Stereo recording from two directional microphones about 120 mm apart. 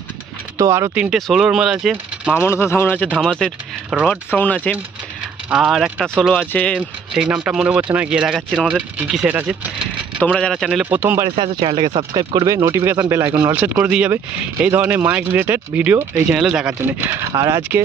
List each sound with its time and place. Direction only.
0.6 s speech: 25° right (ahead or behind)
0.9 s speech: centre (ahead or behind)
2.3 s speech: 20° left (ahead or behind)
3.2 s speech: 5° left (ahead or behind)
5.5 s speech: 5° right (ahead or behind)
7.4 s speech: 10° right (ahead or behind)
8.4 s speech: 5° left (ahead or behind)
8.6 s speech: 5° right (ahead or behind)
10.2 s speech: 5° left (ahead or behind)
10.9 s speech: 15° right (ahead or behind)
11.3 s speech: 55° right (ahead or behind)
12.1 s speech: 35° right (ahead or behind); by 16.7 s 5° right (ahead or behind)
17.0 s speech: 25° right (ahead or behind)